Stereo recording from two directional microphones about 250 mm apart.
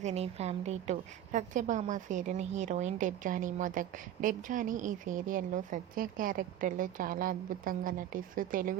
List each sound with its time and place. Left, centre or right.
0.0 s a woman's voice: right